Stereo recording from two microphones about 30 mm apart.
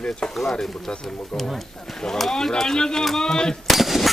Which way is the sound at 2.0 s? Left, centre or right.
Left.